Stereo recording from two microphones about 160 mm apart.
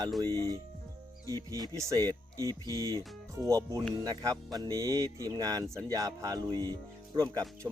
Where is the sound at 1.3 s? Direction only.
20° right (ahead or behind).